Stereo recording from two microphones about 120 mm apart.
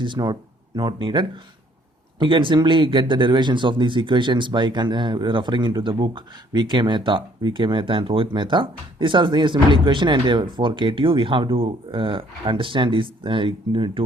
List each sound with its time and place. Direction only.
0.0 s speech: 40° right (ahead or behind)